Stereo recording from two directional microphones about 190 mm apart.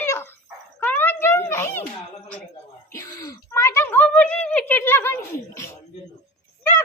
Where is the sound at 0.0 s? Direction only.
10° left (ahead or behind).